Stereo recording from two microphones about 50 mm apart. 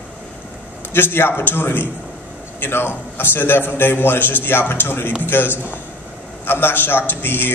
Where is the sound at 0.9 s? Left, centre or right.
Left.